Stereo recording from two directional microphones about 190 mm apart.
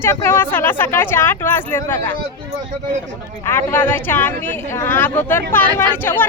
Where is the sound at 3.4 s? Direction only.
10° left (ahead or behind).